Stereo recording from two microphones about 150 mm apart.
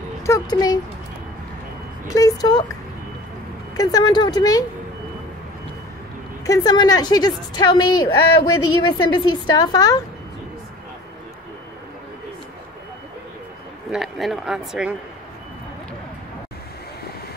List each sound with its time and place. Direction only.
0.3 s a woman's voice: 25° left (ahead or behind)
2.0 s a woman's voice: 25° left (ahead or behind)
3.7 s a woman's voice: 25° left (ahead or behind)
6.4 s a woman's voice: 25° left (ahead or behind)
13.9 s speech: centre (ahead or behind)